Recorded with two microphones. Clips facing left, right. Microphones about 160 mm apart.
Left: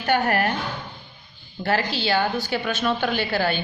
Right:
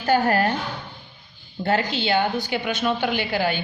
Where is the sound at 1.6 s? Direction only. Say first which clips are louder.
Right 1 dB; 25° right (ahead or behind).